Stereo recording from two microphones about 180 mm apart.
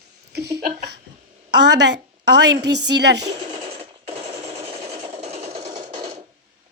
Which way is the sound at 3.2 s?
30° right (ahead or behind).